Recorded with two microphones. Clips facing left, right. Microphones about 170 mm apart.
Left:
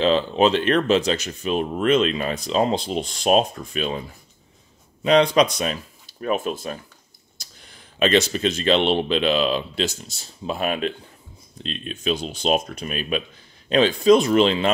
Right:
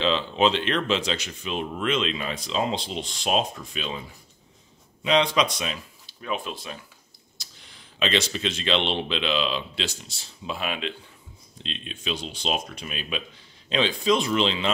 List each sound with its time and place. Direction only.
0.0 s speech: 45° left (ahead or behind)
5.0 s speech: 45° left (ahead or behind)